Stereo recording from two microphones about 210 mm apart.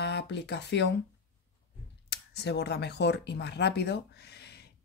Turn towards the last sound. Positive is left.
turn(degrees=50)  # may be behind; listen again after turning